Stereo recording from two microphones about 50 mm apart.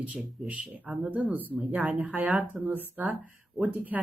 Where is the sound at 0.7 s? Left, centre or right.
Right.